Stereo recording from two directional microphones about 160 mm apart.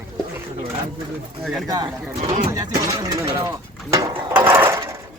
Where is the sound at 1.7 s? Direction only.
25° right (ahead or behind).